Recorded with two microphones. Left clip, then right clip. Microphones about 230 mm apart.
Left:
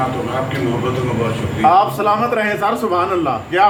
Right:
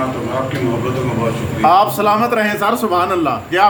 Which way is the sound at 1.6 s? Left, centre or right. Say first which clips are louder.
Right 1 dB; right.